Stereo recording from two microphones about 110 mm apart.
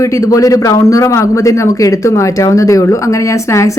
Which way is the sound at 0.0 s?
30° left (ahead or behind).